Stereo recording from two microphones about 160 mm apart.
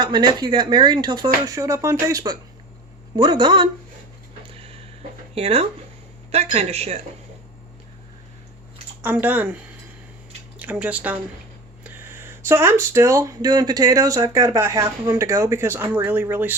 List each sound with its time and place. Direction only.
0.0 s speech: 25° right (ahead or behind)
4.4 s a sound: 35° right (ahead or behind)
5.3 s speech: 40° right (ahead or behind)
9.0 s speech: 10° right (ahead or behind)
10.6 s speech: 10° right (ahead or behind)